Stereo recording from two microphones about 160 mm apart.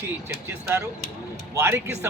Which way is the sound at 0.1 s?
15° right (ahead or behind).